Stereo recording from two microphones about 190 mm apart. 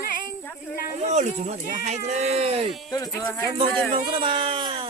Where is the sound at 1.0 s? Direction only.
35° right (ahead or behind).